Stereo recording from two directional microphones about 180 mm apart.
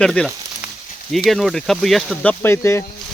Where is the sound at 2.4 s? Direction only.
15° left (ahead or behind).